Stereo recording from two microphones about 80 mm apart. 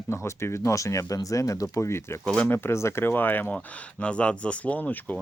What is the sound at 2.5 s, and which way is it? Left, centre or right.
Speech, left.